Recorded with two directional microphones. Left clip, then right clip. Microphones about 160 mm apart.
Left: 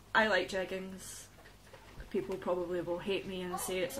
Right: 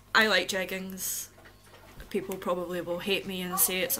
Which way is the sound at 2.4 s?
15° right (ahead or behind).